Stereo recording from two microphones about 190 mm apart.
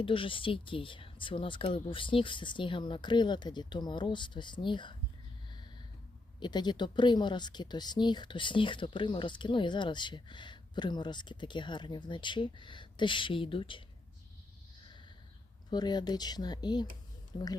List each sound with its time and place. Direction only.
0.0 s speech: 25° left (ahead or behind)
6.4 s speech: 25° left (ahead or behind)
15.7 s speech: 20° left (ahead or behind)